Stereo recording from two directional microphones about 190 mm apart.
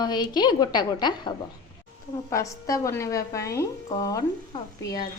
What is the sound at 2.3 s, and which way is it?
A woman's voice, 15° left (ahead or behind).